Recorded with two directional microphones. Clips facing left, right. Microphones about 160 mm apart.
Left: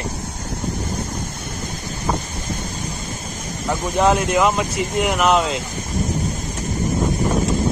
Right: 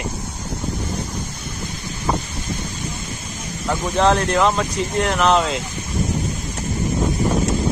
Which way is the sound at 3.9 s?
15° left (ahead or behind).